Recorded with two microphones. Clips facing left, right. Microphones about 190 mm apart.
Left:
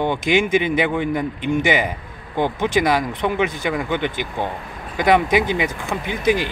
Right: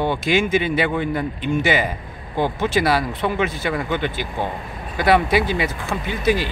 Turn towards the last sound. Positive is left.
turn(degrees=15)  # may be behind; listen again after turning